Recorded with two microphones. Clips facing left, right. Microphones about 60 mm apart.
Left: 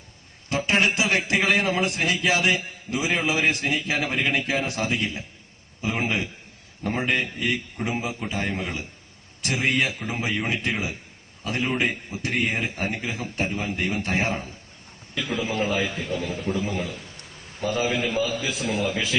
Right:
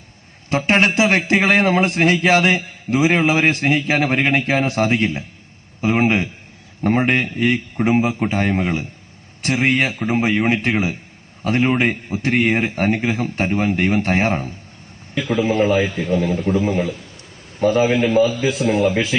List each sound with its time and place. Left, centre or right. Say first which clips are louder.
0.5 s a man's voice: right 6 dB; right
5.8 s a sound: right 9 dB; right
6.8 s a man's voice: right 8 dB; right